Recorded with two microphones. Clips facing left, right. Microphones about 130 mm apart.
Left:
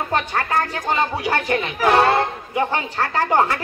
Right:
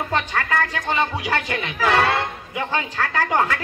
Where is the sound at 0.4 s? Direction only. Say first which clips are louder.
Left 1 dB; 35° left (ahead or behind).